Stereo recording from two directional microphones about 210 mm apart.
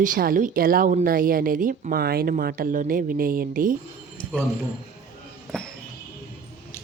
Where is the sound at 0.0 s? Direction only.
40° right (ahead or behind).